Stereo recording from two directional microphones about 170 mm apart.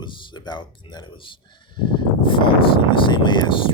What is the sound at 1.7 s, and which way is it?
Speech, 30° left (ahead or behind).